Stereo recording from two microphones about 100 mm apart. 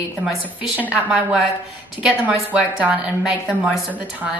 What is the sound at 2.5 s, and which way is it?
Speech, 15° right (ahead or behind).